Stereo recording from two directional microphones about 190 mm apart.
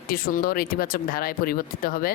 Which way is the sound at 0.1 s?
50° left (ahead or behind).